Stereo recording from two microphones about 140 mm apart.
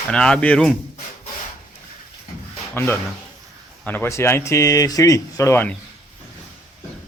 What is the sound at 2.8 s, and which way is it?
Speech, 15° left (ahead or behind).